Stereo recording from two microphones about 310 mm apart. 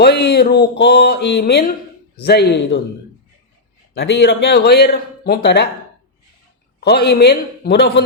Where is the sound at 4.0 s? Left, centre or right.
Left.